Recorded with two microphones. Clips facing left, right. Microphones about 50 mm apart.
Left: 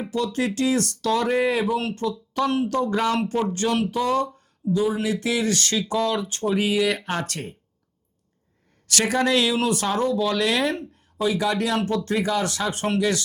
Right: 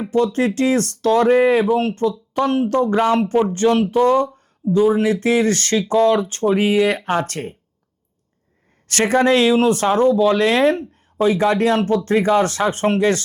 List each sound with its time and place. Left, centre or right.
0.0 s speech: right
8.9 s speech: right